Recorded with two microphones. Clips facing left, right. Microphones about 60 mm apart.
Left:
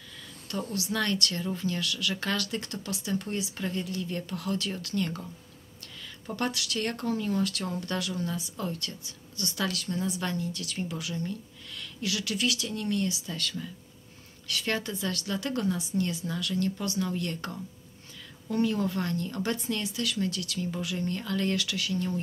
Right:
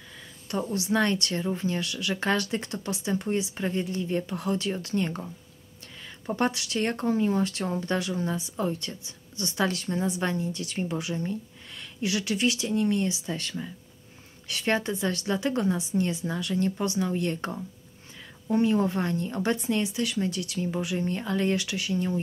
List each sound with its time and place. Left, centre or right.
0.5 s speech: right